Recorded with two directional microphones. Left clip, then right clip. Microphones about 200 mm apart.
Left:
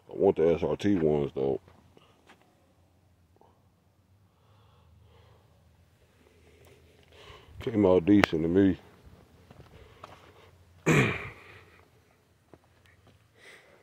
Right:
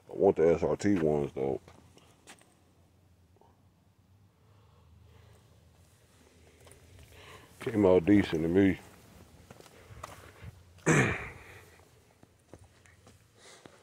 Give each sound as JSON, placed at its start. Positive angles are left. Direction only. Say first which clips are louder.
{"t": 0.1, "sound": "speech", "louder": "left 1 dB", "side_deg": 20}
{"t": 1.0, "sound": "speech", "louder": "left 3 dB", "side_deg": 30}
{"t": 2.3, "sound": "a sound", "louder": "right 5 dB", "side_deg": -70}
{"t": 7.1, "sound": "speech", "louder": "left 1 dB", "side_deg": 30}
{"t": 9.5, "sound": "walk", "louder": "right 2 dB", "side_deg": -45}
{"t": 10.4, "sound": "throat clearing", "louder": "left 2 dB", "side_deg": 25}
{"t": 12.5, "sound": "a sound", "louder": "right 1 dB", "side_deg": -50}